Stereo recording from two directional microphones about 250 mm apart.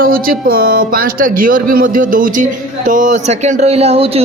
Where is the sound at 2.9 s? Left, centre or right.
Right.